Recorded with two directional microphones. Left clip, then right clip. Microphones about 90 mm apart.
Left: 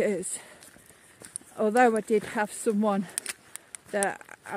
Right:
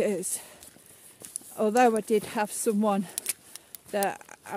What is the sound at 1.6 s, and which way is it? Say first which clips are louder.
Speech: even; 10° right (ahead or behind).